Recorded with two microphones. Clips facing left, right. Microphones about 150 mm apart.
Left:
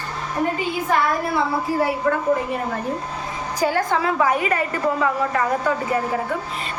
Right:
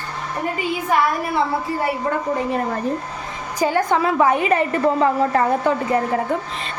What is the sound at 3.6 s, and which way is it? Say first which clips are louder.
A woman's voice: right 2 dB; 15° right (ahead or behind).